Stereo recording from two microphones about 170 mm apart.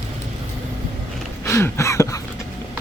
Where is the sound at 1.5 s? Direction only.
15° left (ahead or behind).